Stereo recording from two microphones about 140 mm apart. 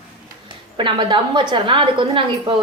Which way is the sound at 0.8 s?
35° right (ahead or behind).